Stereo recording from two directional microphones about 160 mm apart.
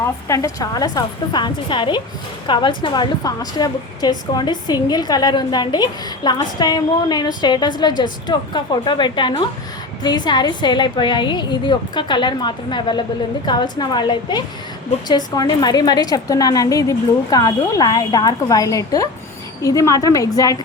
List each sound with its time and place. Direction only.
0.0 s a woman's voice: 20° left (ahead or behind)